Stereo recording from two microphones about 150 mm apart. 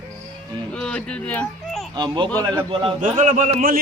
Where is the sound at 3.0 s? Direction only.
60° right (ahead or behind).